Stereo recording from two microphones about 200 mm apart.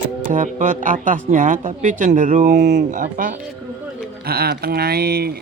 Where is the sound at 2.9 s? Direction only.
40° right (ahead or behind).